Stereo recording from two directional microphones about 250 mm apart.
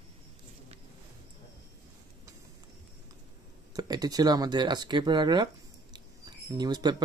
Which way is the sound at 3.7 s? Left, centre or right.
Centre.